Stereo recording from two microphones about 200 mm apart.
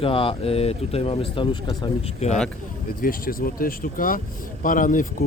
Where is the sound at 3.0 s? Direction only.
45° left (ahead or behind).